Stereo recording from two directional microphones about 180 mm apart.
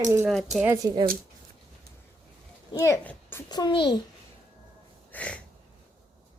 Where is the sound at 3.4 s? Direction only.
25° left (ahead or behind).